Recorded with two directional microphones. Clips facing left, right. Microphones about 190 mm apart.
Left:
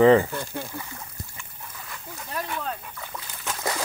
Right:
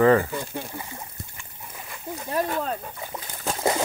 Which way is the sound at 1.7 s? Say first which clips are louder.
Right 7 dB; 25° right (ahead or behind).